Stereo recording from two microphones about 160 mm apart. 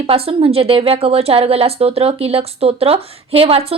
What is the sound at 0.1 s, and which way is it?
A woman's voice, 35° right (ahead or behind).